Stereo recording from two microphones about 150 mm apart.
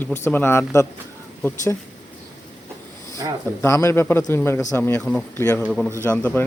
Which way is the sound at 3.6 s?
20° left (ahead or behind).